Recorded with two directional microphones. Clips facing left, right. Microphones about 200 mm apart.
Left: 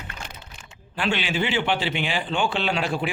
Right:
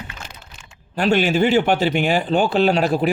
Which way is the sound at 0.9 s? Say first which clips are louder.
Right 8 dB; 40° right (ahead or behind).